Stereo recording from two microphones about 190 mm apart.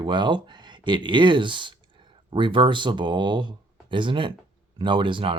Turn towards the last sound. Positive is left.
turn(degrees=-25)  # may be behind; listen again after turning